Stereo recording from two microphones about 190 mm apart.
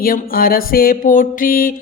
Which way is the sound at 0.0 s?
50° left (ahead or behind).